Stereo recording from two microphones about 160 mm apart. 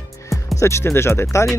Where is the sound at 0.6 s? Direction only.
15° left (ahead or behind).